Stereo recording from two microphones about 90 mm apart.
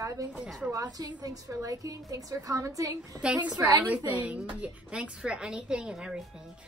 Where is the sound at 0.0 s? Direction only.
35° right (ahead or behind).